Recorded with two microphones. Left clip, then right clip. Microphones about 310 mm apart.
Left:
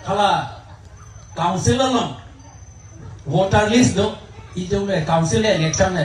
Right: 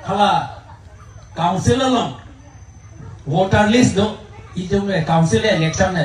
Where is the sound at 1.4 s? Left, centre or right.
Left.